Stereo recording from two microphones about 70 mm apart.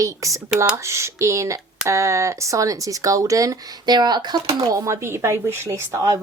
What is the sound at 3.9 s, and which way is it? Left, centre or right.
Speech, right.